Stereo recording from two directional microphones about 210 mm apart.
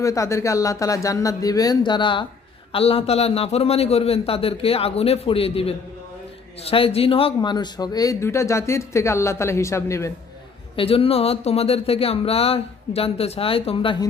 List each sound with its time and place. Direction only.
0.0 s speech: 15° left (ahead or behind)
10.8 s speech: 25° left (ahead or behind)